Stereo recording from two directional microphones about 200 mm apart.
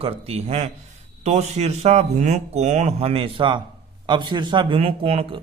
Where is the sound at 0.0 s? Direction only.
30° right (ahead or behind).